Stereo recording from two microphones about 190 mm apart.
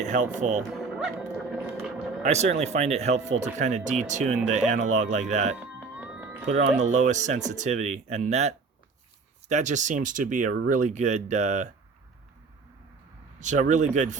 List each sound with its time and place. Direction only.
0.0 s speech: 40° right (ahead or behind)
0.7 s music: centre (ahead or behind)
2.2 s speech: 35° right (ahead or behind)
5.5 s music: 5° right (ahead or behind)
6.5 s speech: 40° right (ahead or behind)
13.4 s speech: 40° right (ahead or behind)